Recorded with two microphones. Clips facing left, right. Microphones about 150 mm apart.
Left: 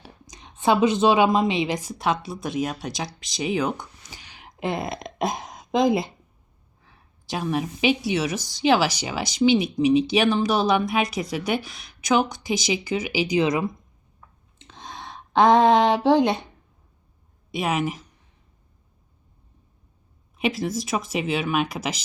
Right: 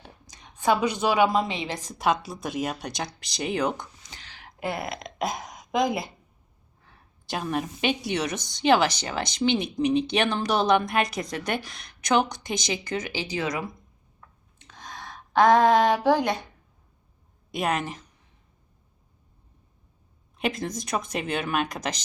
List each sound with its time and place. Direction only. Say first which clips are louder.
0.3 s a woman's voice: left 2 dB; 20° left (ahead or behind)
1.9 s a woman's voice: even; centre (ahead or behind)
4.1 s a sound: left 2 dB; 15° left (ahead or behind)
6.8 s a woman's voice: left 1 dB; centre (ahead or behind); by 13.7 s 20° left (ahead or behind)
14.6 s a sound: left 3 dB; 25° left (ahead or behind)
17.5 s a woman's voice: left 2 dB; 5° left (ahead or behind)
20.3 s a woman's voice: left 4 dB; 5° left (ahead or behind)